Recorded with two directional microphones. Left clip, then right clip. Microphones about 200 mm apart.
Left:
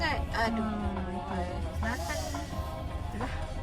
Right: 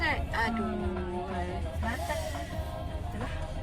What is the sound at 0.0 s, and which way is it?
Music, 20° left (ahead or behind).